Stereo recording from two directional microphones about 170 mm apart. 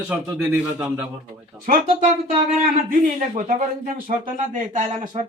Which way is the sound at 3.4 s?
50° right (ahead or behind).